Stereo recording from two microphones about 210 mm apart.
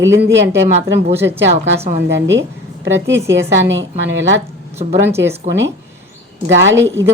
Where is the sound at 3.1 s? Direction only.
15° right (ahead or behind).